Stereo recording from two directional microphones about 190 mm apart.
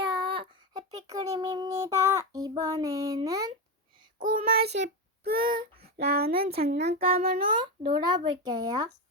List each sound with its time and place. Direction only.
0.3 s child singing: 25° right (ahead or behind)
4.5 s child singing: 60° right (ahead or behind)
5.4 s child singing: 25° right (ahead or behind)
6.0 s speech: 55° right (ahead or behind)
6.8 s a child's voice: 30° right (ahead or behind)